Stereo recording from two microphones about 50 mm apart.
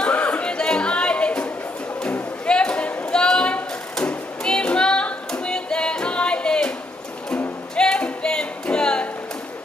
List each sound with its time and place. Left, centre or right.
0.0 s a sound: left
4.0 s music: left
7.7 s music: centre